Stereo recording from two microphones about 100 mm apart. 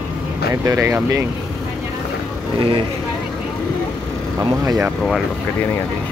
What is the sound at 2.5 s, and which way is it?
Speech, 60° right (ahead or behind).